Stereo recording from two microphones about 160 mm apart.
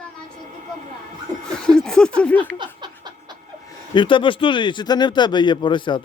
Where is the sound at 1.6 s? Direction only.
5° left (ahead or behind).